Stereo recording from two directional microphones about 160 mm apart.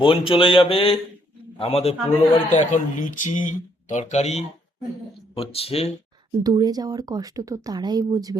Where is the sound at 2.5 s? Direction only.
50° left (ahead or behind).